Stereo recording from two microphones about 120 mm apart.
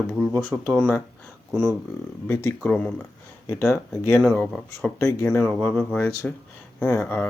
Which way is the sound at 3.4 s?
25° left (ahead or behind).